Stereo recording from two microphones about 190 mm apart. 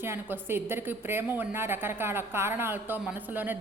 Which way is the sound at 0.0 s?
10° right (ahead or behind).